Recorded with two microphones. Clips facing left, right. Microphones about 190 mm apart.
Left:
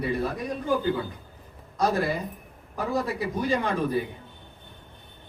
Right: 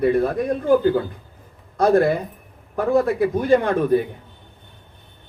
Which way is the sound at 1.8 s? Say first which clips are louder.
Right 9 dB; 55° right (ahead or behind).